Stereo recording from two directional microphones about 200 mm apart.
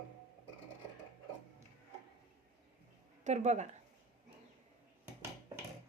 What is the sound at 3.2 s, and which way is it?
Speech, 35° right (ahead or behind).